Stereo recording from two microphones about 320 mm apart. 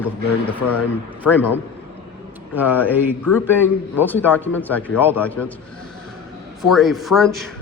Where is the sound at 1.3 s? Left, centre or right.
Left.